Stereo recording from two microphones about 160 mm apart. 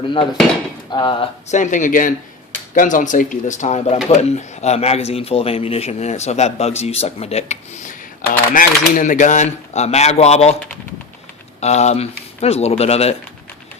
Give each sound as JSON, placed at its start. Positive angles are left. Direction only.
{"t": 0.9, "sound": "speech", "side_deg": 25}
{"t": 1.5, "sound": "speech", "side_deg": 50}
{"t": 8.3, "sound": "speech", "side_deg": 55}
{"t": 11.6, "sound": "speech", "side_deg": 45}